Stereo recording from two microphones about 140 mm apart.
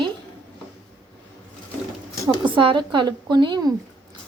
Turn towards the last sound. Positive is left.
turn(degrees=-30)  # may be behind; listen again after turning